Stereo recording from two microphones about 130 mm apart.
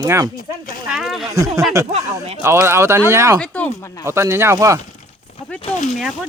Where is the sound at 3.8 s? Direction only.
25° left (ahead or behind).